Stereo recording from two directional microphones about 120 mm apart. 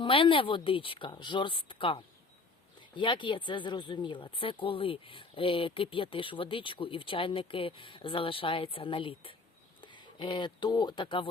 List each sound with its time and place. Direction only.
0.0 s speech: 45° left (ahead or behind)